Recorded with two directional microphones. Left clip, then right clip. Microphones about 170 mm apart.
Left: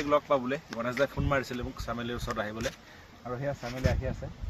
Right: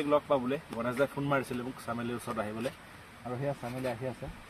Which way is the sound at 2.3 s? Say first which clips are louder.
Left 2 dB; 5° left (ahead or behind).